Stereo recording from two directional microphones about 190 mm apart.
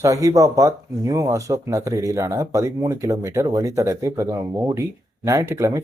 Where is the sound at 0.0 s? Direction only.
15° right (ahead or behind).